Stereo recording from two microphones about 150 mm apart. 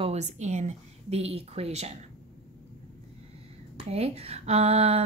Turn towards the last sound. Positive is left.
turn(degrees=-40)  # may be behind; listen again after turning